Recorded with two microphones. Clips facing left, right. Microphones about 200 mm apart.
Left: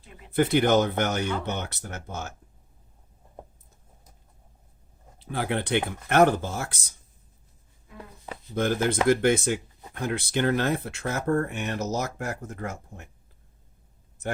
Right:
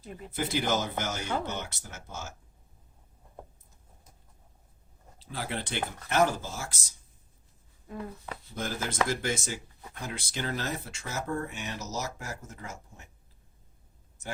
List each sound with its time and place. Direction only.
0.3 s speech: 60° left (ahead or behind)
5.2 s speech: 60° left (ahead or behind)
8.5 s speech: 60° left (ahead or behind)